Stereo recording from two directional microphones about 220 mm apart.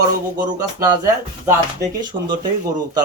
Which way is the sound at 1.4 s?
15° right (ahead or behind).